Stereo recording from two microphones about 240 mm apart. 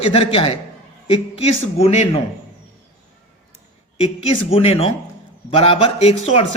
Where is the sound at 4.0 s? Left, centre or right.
Left.